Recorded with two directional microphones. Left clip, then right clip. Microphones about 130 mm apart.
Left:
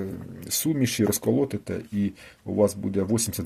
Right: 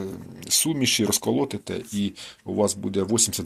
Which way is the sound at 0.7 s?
45° left (ahead or behind).